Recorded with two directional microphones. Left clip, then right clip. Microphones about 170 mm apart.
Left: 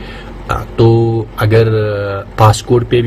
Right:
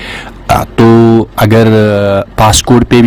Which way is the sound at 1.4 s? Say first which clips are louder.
Right 3 dB; 70° right (ahead or behind).